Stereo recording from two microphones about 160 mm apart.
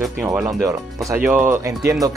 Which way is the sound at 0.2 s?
5° right (ahead or behind).